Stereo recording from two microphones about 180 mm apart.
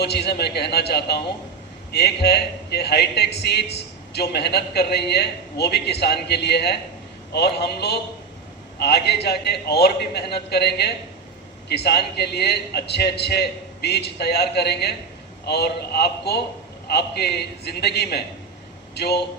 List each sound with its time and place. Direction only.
0.0 s a man's voice: 65° left (ahead or behind)